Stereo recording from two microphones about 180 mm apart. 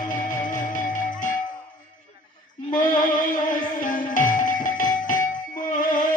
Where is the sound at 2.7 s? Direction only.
45° left (ahead or behind).